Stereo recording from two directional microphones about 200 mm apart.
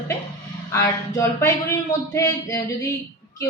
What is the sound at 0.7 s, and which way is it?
A man's voice, 15° left (ahead or behind).